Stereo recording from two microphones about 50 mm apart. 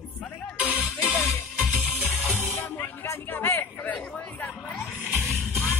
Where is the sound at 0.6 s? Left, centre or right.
Right.